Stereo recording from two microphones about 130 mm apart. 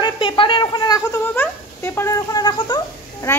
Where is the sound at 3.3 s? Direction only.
20° left (ahead or behind).